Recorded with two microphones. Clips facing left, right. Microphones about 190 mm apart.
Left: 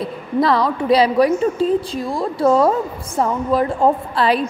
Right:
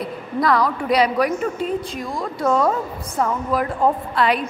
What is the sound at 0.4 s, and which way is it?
A woman's voice, 25° left (ahead or behind).